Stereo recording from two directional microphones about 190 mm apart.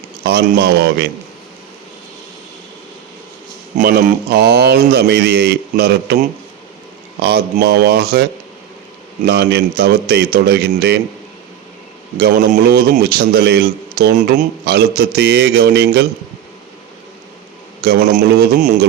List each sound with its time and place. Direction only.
0.3 s a man's voice: 60° right (ahead or behind)
3.8 s a man's voice: 55° right (ahead or behind)
7.2 s a man's voice: 60° right (ahead or behind)
12.1 s a man's voice: 50° right (ahead or behind)
18.3 s a man's voice: 55° right (ahead or behind)